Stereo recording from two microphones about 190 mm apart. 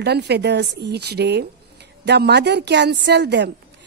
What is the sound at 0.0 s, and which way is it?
Speech, 60° right (ahead or behind).